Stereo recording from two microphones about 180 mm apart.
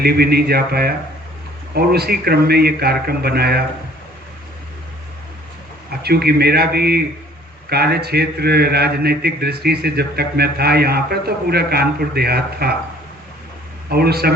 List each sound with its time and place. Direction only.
0.0 s a man's voice: 60° right (ahead or behind)
6.0 s a man's voice: 60° right (ahead or behind)
13.9 s a man's voice: 60° right (ahead or behind)